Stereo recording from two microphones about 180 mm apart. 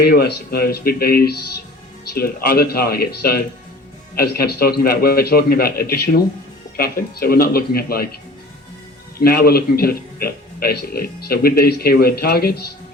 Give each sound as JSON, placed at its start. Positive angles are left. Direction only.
{"t": 0.0, "sound": "a man's voice", "side_deg": 60}
{"t": 9.1, "sound": "a man's voice", "side_deg": 55}